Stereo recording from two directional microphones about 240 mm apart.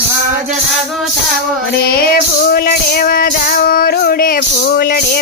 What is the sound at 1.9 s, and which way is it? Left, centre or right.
Music, left.